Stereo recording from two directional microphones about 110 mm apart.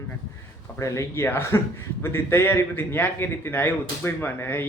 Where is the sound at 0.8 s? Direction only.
25° left (ahead or behind).